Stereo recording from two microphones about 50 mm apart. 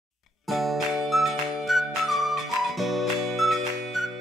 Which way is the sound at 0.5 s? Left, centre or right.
Centre.